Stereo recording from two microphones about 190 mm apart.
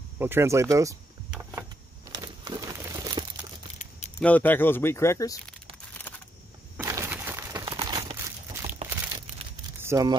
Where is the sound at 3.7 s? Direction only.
40° left (ahead or behind).